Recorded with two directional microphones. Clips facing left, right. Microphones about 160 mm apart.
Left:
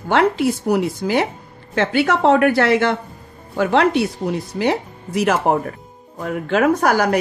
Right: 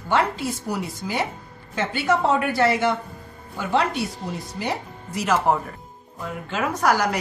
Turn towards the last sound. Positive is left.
turn(degrees=55)  # may be behind; listen again after turning